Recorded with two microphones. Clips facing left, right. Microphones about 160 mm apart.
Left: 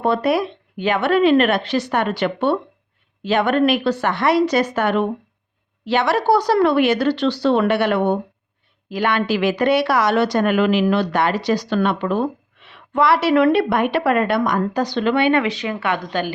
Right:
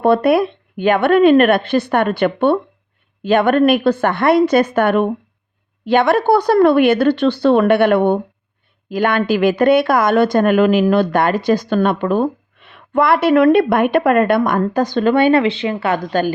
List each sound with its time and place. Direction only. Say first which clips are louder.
0.0 s speech: right 5 dB; 60° right (ahead or behind); by 16.3 s 40° right (ahead or behind)